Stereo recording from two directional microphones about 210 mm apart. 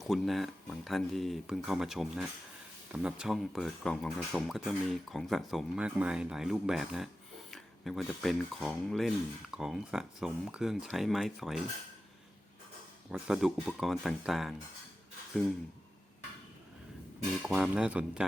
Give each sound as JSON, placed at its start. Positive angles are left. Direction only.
{"t": 0.0, "sound": "speech", "side_deg": 0}
{"t": 13.1, "sound": "speech", "side_deg": -5}
{"t": 17.4, "sound": "speech", "side_deg": 0}